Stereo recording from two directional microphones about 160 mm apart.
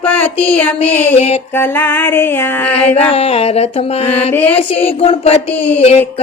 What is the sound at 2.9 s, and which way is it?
Female singing, 35° left (ahead or behind).